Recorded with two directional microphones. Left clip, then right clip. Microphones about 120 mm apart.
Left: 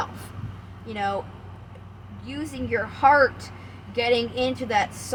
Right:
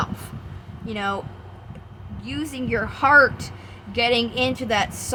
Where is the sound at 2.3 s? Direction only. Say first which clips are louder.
Right 2 dB; 50° right (ahead or behind).